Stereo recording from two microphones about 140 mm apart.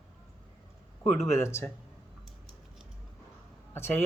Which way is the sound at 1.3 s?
20° left (ahead or behind).